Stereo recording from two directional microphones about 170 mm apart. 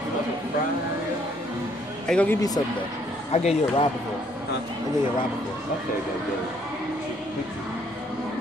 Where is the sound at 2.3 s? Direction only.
20° left (ahead or behind).